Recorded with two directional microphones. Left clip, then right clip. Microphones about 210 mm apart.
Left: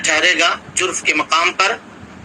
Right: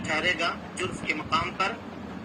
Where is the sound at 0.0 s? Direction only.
60° left (ahead or behind).